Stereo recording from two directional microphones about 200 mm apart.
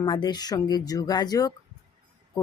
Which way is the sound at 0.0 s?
20° left (ahead or behind).